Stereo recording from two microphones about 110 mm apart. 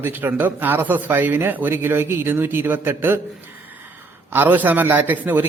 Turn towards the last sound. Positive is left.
turn(degrees=-15)  # may be behind; listen again after turning